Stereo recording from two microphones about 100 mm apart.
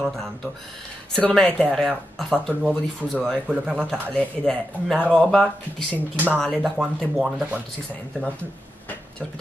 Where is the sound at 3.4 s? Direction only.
15° right (ahead or behind).